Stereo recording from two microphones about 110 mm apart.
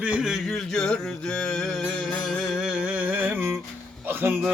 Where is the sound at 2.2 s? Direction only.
Centre (ahead or behind).